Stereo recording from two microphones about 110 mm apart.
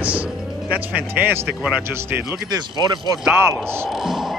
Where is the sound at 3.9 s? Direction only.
5° right (ahead or behind).